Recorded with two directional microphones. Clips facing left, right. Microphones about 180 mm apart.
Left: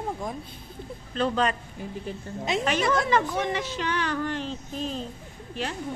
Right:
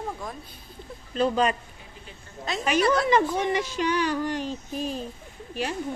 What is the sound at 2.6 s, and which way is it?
A woman's voice, 10° right (ahead or behind).